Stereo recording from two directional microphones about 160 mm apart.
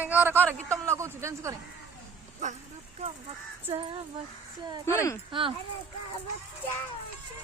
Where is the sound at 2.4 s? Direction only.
50° right (ahead or behind).